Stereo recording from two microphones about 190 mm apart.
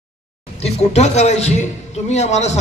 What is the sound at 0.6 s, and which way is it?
A man's voice, 35° left (ahead or behind).